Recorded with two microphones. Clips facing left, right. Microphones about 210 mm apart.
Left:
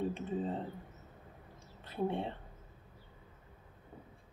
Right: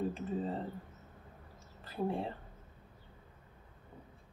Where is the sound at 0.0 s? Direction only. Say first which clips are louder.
Even; centre (ahead or behind).